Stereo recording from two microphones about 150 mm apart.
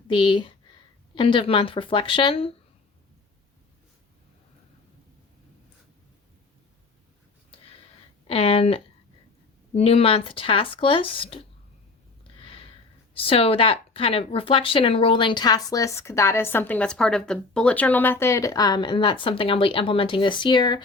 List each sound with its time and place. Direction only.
0.1 s speech: 35° left (ahead or behind)
8.3 s speech: 40° left (ahead or behind)
12.4 s a sound: 40° left (ahead or behind)
13.1 s speech: 40° left (ahead or behind)